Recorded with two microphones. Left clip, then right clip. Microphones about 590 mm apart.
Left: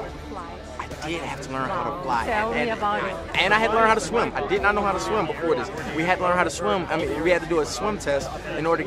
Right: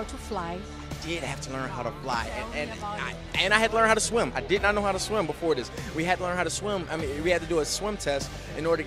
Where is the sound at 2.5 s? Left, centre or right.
Right.